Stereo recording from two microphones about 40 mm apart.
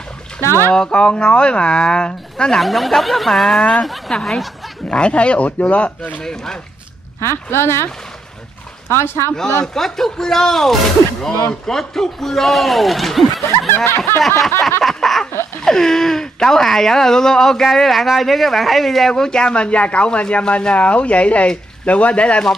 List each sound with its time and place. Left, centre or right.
0.4 s speech: left
0.9 s speech: left
2.6 s speech: centre
4.8 s speech: left
5.6 s speech: left
6.2 s speech: centre
7.5 s speech: left
9.8 s speech: centre
13.8 s snicker: left
14.2 s speech: centre
14.8 s a sound: centre
15.6 s speech: centre
19.2 s speech: left